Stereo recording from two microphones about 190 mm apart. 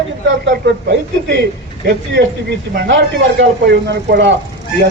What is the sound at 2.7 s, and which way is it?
A man's voice, 70° right (ahead or behind).